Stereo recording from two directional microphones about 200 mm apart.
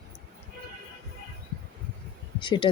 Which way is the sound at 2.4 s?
25° left (ahead or behind).